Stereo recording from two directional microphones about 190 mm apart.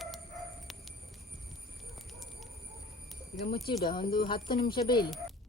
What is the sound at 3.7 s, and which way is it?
Speech, 25° left (ahead or behind).